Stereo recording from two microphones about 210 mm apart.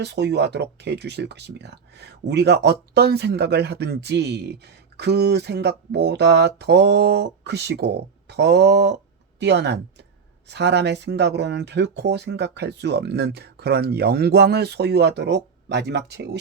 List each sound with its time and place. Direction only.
0.0 s speech: 55° right (ahead or behind)